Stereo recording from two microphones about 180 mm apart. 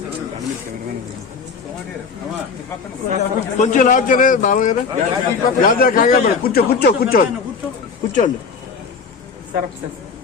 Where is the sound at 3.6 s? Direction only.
45° left (ahead or behind).